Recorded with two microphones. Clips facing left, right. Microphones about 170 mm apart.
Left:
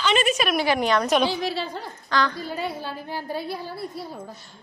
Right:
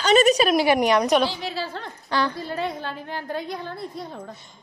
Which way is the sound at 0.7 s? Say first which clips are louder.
Right 3 dB; 15° right (ahead or behind).